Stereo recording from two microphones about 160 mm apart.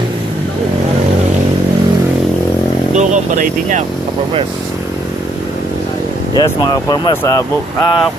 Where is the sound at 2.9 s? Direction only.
50° right (ahead or behind).